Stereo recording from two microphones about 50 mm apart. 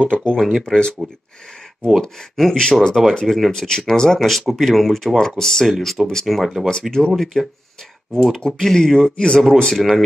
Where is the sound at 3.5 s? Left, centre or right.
Centre.